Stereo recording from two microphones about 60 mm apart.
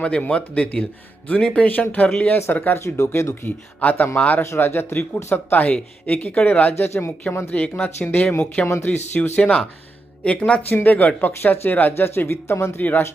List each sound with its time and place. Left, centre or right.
0.0 s speech: centre
2.7 s speech: left
3.4 s speech: left
4.4 s speech: left
6.7 s speech: left
7.5 s speech: left
8.6 s speech: left
8.9 s speech: left
10.2 s speech: left
10.7 s speech: left
11.3 s speech: left
12.0 s speech: left
12.8 s speech: left